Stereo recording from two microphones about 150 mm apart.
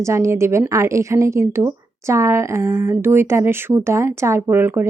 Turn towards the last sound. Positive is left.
turn(degrees=-15)  # may be behind; listen again after turning